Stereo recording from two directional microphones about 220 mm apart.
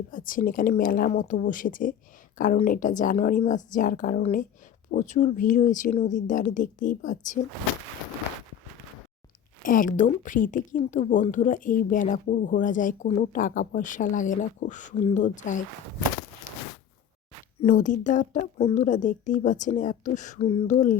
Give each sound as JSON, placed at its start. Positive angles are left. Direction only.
{"t": 0.1, "sound": "a woman's voice", "side_deg": 40}
{"t": 9.6, "sound": "a woman's voice", "side_deg": 40}
{"t": 17.6, "sound": "a woman's voice", "side_deg": 35}